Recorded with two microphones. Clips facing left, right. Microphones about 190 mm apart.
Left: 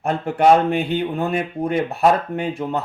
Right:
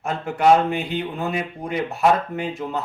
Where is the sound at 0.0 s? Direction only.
55° left (ahead or behind).